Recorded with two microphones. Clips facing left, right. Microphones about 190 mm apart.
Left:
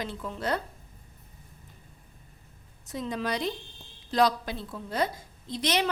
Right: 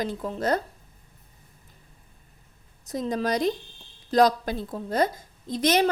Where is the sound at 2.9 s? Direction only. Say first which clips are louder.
Right 5 dB; 40° right (ahead or behind).